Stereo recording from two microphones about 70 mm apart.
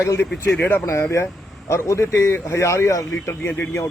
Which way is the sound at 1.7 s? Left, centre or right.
Left.